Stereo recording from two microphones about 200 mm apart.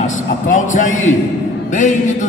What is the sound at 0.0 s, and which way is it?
Speech, 40° left (ahead or behind).